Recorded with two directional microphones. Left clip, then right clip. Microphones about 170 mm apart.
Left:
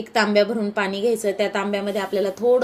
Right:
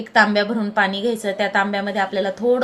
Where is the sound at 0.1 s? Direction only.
30° left (ahead or behind).